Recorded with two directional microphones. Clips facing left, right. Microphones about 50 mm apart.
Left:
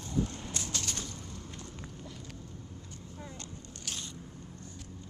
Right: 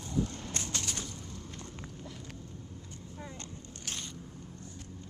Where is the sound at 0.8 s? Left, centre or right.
Centre.